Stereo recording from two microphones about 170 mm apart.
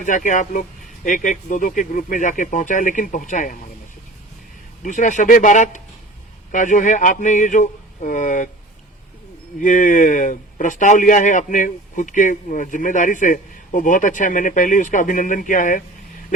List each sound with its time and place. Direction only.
0.0 s a man's voice: 50° left (ahead or behind)
4.8 s a man's voice: 50° left (ahead or behind)
9.6 s a man's voice: 50° left (ahead or behind)